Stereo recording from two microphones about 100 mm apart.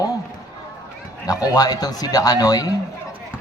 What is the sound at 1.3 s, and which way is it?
A man's voice, 40° left (ahead or behind).